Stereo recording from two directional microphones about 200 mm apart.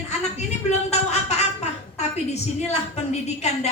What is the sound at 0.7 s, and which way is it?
A woman's voice, 30° left (ahead or behind).